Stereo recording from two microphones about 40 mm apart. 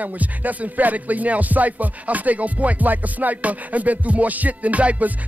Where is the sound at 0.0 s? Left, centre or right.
Right.